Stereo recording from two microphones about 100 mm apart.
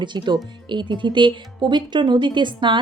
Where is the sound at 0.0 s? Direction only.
50° right (ahead or behind).